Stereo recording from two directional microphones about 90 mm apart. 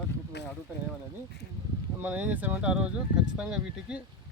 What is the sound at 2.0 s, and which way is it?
Speech, 15° right (ahead or behind).